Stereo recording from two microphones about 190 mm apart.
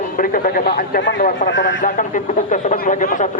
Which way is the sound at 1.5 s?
75° left (ahead or behind).